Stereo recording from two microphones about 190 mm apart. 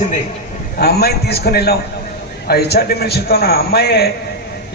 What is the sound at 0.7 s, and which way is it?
A man's voice, 55° left (ahead or behind).